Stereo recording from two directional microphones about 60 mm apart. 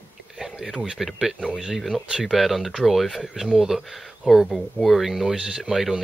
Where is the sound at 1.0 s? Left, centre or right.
Centre.